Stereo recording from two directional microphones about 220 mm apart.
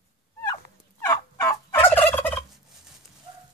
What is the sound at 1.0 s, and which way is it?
Fowl, 10° left (ahead or behind).